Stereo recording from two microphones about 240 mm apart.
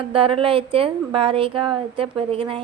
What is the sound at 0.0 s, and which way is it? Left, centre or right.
Speech, right.